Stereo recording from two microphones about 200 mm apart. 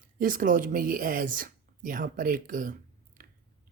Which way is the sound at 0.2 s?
45° right (ahead or behind).